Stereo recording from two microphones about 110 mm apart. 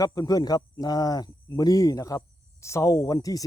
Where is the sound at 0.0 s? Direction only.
35° left (ahead or behind).